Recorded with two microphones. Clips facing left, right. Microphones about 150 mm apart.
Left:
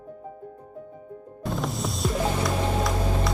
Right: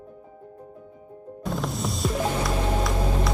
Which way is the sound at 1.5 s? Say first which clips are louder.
Even; centre (ahead or behind).